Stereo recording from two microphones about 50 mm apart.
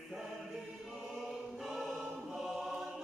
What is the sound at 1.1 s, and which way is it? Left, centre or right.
Choir, centre.